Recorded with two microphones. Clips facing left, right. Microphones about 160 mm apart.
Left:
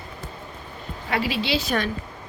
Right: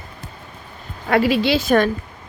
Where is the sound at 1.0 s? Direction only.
50° right (ahead or behind).